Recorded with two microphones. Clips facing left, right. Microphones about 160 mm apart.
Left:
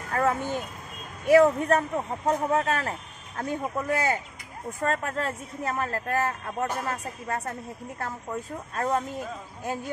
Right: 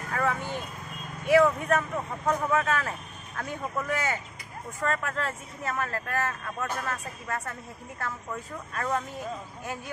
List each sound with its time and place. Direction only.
0.1 s speech: 40° left (ahead or behind)